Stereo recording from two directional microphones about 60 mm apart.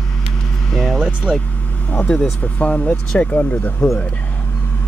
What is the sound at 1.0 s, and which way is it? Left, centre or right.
Vehicle, centre.